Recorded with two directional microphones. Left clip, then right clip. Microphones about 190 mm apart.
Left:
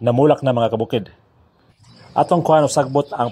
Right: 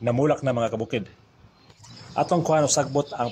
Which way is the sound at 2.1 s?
30° left (ahead or behind).